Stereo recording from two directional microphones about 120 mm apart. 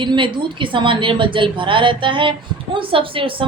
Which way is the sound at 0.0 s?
40° right (ahead or behind).